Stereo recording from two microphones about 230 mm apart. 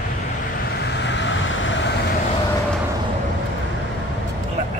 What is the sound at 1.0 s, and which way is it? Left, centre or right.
Vehicle, left.